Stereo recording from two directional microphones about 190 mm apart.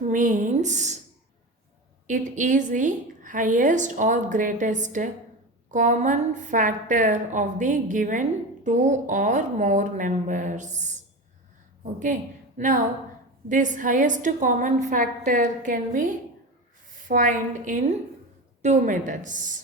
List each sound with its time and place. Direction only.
0.1 s a woman's voice: 45° right (ahead or behind)
2.0 s a woman's voice: 40° right (ahead or behind)